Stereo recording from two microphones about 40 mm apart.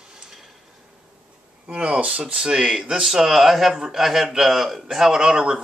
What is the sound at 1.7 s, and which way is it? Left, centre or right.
Speech, right.